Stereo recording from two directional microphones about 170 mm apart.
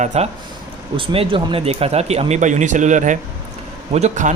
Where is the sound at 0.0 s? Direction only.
45° right (ahead or behind).